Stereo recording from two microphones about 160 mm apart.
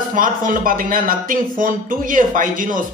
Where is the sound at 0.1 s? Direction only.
60° right (ahead or behind).